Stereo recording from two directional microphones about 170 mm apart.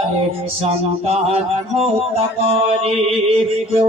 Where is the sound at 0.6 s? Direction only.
35° right (ahead or behind).